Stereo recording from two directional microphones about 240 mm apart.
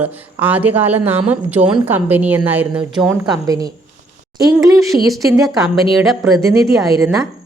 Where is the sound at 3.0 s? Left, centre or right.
Centre.